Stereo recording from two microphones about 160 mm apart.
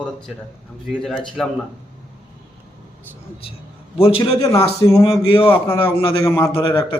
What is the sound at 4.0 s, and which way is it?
Speech, 35° left (ahead or behind).